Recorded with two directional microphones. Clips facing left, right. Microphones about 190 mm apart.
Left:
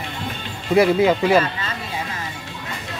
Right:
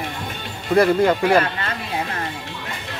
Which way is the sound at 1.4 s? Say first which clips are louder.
Right 1 dB; 60° right (ahead or behind).